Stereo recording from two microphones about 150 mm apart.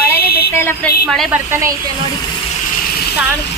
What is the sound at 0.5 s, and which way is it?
Speech, 15° left (ahead or behind).